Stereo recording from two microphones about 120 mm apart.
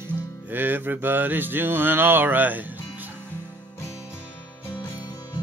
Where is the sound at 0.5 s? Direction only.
15° right (ahead or behind).